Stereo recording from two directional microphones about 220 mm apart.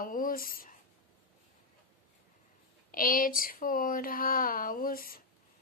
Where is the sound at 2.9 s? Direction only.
40° left (ahead or behind).